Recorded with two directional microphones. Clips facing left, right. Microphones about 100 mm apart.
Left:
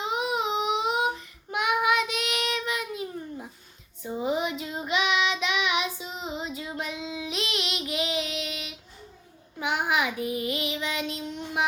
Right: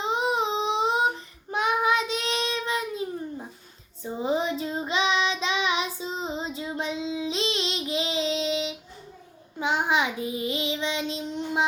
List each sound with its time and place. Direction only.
0.0 s a sound: 30° right (ahead or behind)
1.5 s child singing: 30° right (ahead or behind)
4.0 s child singing: 30° right (ahead or behind)